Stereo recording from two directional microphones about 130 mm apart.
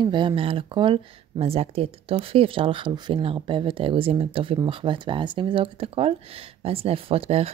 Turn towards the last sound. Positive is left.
turn(degrees=-50)  # may be behind; listen again after turning